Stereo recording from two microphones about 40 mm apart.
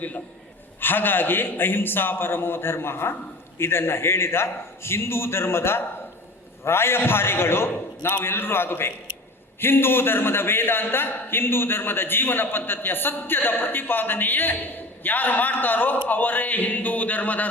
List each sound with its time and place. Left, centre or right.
0.8 s a man's voice: left
3.6 s a man's voice: left